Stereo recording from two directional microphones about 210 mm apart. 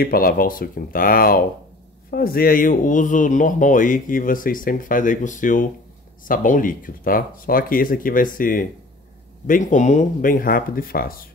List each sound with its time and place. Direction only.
0.0 s speech: 45° left (ahead or behind)